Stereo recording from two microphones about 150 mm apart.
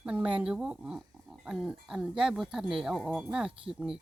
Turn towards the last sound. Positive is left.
turn(degrees=-5)  # may be behind; listen again after turning